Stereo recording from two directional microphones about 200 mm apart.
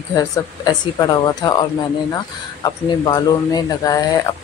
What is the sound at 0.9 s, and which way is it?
Speech, 20° left (ahead or behind).